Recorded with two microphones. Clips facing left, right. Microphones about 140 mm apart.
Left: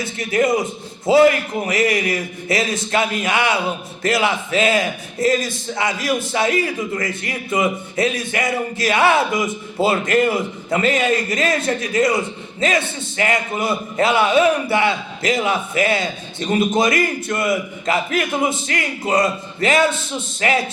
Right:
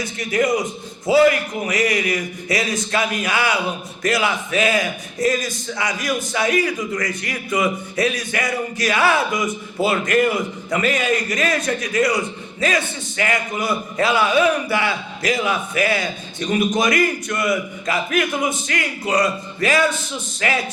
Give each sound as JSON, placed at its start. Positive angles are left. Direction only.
{"t": 0.0, "sound": "a man's voice", "side_deg": 25}